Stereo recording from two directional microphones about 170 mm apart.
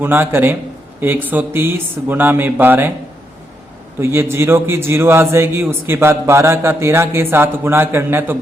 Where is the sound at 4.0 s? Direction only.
15° right (ahead or behind).